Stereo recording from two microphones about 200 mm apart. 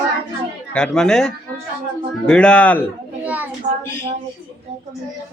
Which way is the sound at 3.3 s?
10° right (ahead or behind).